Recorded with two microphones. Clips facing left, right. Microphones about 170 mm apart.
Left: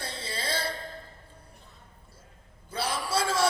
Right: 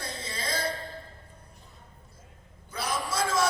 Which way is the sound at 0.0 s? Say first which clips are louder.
Left 1 dB; 30° left (ahead or behind).